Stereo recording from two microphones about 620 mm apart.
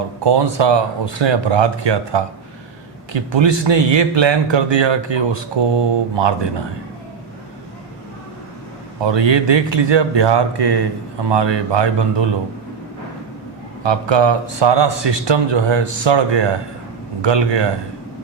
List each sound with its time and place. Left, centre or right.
0.3 s speech: right
9.0 s speech: right
13.8 s speech: right